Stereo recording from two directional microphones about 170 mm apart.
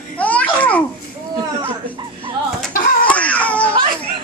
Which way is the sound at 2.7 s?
55° left (ahead or behind).